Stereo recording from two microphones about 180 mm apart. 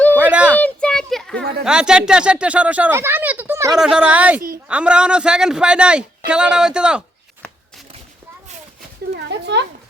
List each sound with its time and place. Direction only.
0.1 s a sound: 10° right (ahead or behind)
0.6 s children playing: 5° left (ahead or behind)
1.6 s speech: 5° right (ahead or behind)
3.8 s speech: 5° right (ahead or behind)
4.4 s a woman's voice: 50° right (ahead or behind)
4.7 s a man's voice: 5° right (ahead or behind)
9.1 s a sound: 70° right (ahead or behind)